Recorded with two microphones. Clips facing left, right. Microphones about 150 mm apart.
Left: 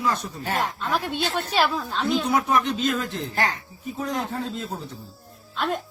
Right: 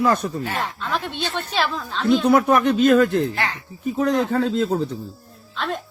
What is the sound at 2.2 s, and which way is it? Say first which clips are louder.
Speech: right 6 dB; 55° right (ahead or behind).